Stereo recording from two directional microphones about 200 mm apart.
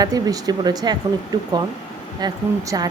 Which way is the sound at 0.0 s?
20° right (ahead or behind).